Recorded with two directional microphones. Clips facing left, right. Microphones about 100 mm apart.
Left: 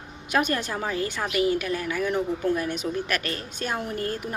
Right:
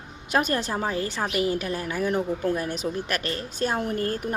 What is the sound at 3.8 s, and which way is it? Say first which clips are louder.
Speech: right 3 dB; 45° right (ahead or behind).